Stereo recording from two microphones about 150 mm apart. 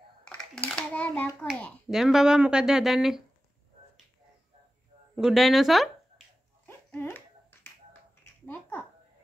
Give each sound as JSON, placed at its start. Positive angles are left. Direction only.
{"t": 0.7, "sound": "a child's voice", "side_deg": 10}
{"t": 1.9, "sound": "speech", "side_deg": -5}
{"t": 5.1, "sound": "speech", "side_deg": 0}
{"t": 6.6, "sound": "finger snapping", "side_deg": 15}
{"t": 8.5, "sound": "a sound", "side_deg": 15}